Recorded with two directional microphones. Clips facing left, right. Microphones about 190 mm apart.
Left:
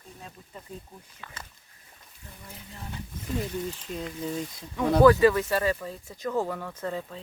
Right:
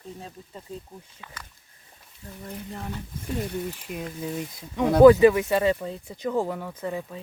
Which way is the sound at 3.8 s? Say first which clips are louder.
Right 1 dB; 15° right (ahead or behind).